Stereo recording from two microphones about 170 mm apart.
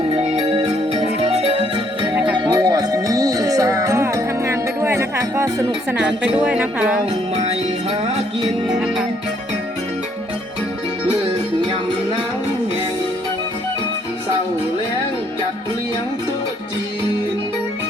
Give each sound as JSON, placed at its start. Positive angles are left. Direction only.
{"t": 0.3, "sound": "music", "side_deg": -35}
{"t": 6.0, "sound": "speech", "side_deg": -5}
{"t": 7.3, "sound": "music", "side_deg": -35}
{"t": 8.6, "sound": "music", "side_deg": -5}